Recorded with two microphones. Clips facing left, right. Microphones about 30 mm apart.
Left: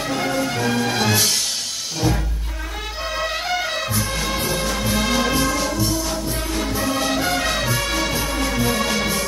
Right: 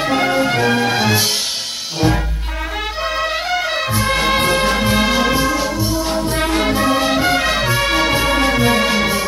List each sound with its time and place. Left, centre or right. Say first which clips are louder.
0.0 s music: right 6 dB; right
3.2 s music: right 2 dB; centre
3.9 s music: right 8 dB; right
4.7 s music: right 6 dB; right
5.1 s music: right 4 dB; centre
6.0 s music: right 7 dB; right
6.9 s music: right 6 dB; right
8.2 s music: right 7 dB; right